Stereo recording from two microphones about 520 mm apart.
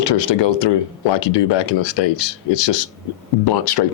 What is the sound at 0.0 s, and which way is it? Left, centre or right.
Speech, left.